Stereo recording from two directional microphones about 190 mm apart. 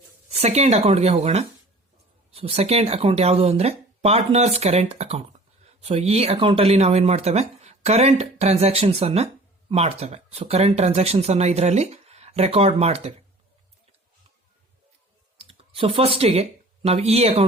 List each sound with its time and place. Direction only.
0.3 s speech: 35° right (ahead or behind)
15.4 s speech: 30° right (ahead or behind)